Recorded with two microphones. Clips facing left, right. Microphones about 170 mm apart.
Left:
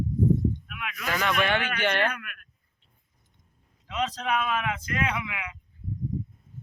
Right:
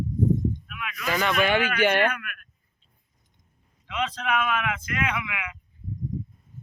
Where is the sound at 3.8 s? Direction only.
40° left (ahead or behind).